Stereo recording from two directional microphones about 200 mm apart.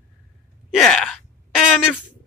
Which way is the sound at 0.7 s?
Centre (ahead or behind).